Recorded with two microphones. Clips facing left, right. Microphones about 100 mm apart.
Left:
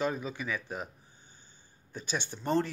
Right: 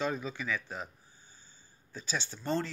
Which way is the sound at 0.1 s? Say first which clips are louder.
Even; 15° left (ahead or behind).